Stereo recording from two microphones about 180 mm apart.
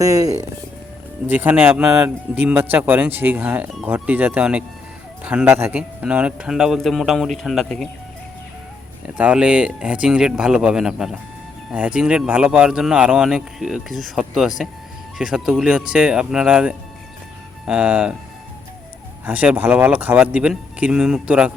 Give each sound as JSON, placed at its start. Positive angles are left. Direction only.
{"t": 0.0, "sound": "a man's voice", "side_deg": -20}
{"t": 9.1, "sound": "speech", "side_deg": -5}
{"t": 19.2, "sound": "a man's voice", "side_deg": -10}